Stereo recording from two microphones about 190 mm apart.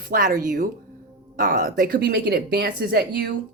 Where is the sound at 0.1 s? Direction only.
45° right (ahead or behind).